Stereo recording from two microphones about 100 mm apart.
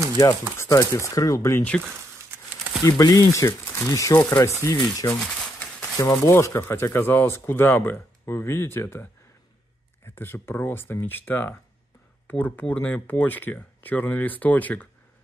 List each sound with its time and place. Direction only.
0.2 s speech: 30° left (ahead or behind)
2.8 s speech: 35° left (ahead or behind)
5.2 s a sound: 5° left (ahead or behind)
5.9 s speech: 30° left (ahead or behind)